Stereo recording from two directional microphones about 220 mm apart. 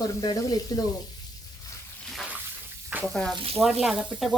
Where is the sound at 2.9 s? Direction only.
Centre (ahead or behind).